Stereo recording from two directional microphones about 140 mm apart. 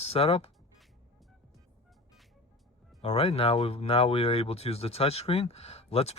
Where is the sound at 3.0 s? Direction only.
45° left (ahead or behind).